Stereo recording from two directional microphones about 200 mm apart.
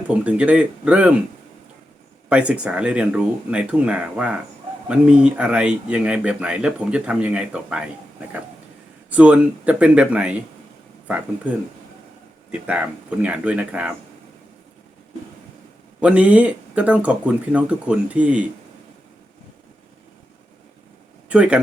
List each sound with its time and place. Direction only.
0.1 s speech: 5° right (ahead or behind)
2.3 s speech: 5° right (ahead or behind)
9.0 s speech: 5° right (ahead or behind)
12.5 s speech: 5° right (ahead or behind)
16.0 s speech: 5° right (ahead or behind)
21.2 s speech: 5° right (ahead or behind)